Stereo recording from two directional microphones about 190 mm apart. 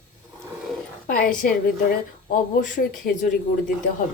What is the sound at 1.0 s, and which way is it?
A woman's voice, 45° left (ahead or behind).